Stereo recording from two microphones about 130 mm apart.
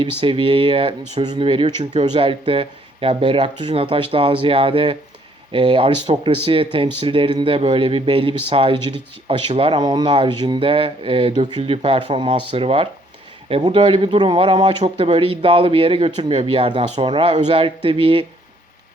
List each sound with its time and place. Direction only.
0.0 s speech: 40° right (ahead or behind)
9.8 s speech: 35° right (ahead or behind)